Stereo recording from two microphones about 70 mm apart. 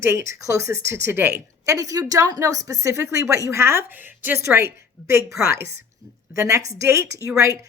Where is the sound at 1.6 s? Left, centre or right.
Right.